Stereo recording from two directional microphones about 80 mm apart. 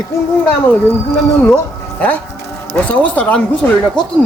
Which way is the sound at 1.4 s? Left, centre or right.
Centre.